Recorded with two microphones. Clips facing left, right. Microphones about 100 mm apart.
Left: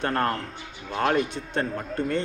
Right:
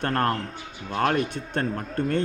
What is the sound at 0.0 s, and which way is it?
A man's voice, 50° right (ahead or behind).